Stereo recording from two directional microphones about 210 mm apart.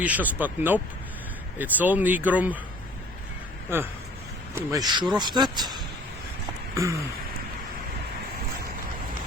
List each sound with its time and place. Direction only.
0.0 s speech: 5° right (ahead or behind)
3.7 s a man's voice: 10° right (ahead or behind)